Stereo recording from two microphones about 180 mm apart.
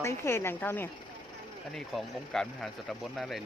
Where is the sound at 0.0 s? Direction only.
15° left (ahead or behind).